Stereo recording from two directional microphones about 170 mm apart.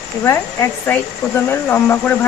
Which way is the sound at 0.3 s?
15° left (ahead or behind).